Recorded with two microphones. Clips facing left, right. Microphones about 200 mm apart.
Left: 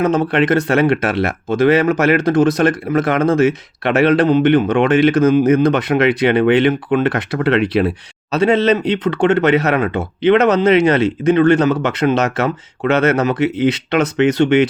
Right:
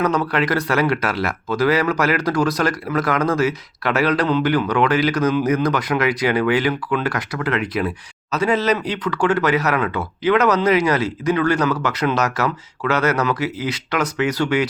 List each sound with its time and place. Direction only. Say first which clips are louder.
0.0 s speech: left 5 dB; 25° left (ahead or behind)
7.6 s speech: left 7 dB; 65° left (ahead or behind)
7.9 s speech: left 5 dB; 30° left (ahead or behind)